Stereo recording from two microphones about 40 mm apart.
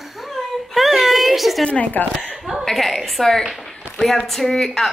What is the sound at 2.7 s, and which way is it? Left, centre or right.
A woman's voice, centre.